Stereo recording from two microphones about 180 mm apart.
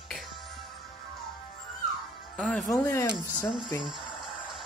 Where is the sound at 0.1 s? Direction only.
Centre (ahead or behind).